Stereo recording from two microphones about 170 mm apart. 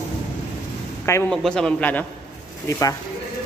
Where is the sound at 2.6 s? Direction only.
20° left (ahead or behind).